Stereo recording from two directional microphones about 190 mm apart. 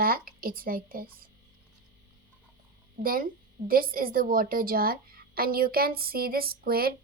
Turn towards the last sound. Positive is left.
turn(degrees=-50)  # may be behind; listen again after turning